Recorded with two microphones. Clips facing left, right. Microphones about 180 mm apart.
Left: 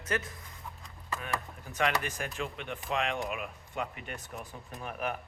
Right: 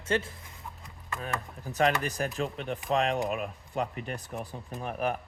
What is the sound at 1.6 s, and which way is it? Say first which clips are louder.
Speech: right 5 dB; 35° right (ahead or behind).